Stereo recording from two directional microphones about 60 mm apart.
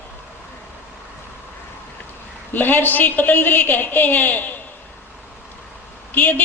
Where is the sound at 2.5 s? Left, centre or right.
Left.